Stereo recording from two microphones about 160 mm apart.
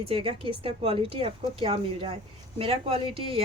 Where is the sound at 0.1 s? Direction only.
35° right (ahead or behind).